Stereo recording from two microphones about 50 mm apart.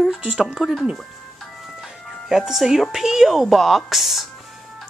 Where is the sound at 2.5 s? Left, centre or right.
Centre.